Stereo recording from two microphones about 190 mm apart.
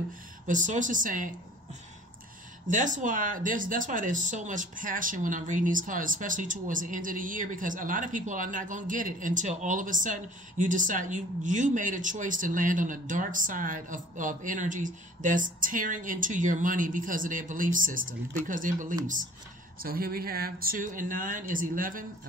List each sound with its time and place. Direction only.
0.5 s speech: 40° right (ahead or behind)
2.7 s speech: 40° right (ahead or behind)